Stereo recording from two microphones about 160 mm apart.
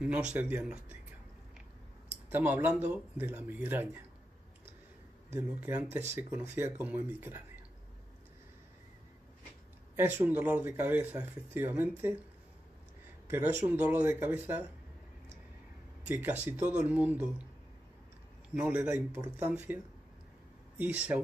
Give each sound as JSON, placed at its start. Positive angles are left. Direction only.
{"t": 0.0, "sound": "speech", "side_deg": -10}
{"t": 2.2, "sound": "speech", "side_deg": -10}
{"t": 5.3, "sound": "speech", "side_deg": -15}
{"t": 9.9, "sound": "speech", "side_deg": -10}
{"t": 13.3, "sound": "speech", "side_deg": -15}
{"t": 16.1, "sound": "speech", "side_deg": -10}
{"t": 18.5, "sound": "speech", "side_deg": -5}